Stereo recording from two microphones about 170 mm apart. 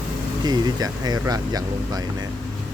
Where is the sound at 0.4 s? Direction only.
25° right (ahead or behind).